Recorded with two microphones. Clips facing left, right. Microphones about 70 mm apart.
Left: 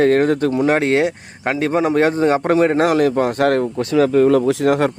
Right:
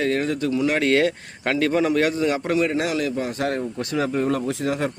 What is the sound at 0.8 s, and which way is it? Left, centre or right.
A man's voice, left.